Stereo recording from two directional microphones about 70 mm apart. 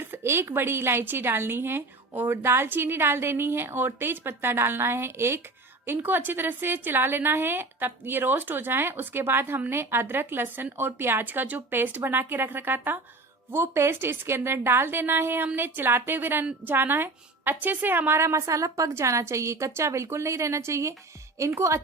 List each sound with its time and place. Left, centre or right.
0.0 s a woman's voice: right